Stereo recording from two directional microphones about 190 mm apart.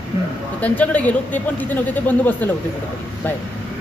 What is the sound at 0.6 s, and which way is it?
A man's voice, 10° left (ahead or behind).